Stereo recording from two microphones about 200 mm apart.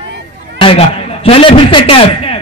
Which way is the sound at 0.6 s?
30° left (ahead or behind).